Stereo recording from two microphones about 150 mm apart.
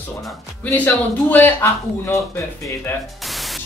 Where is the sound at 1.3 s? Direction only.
15° left (ahead or behind).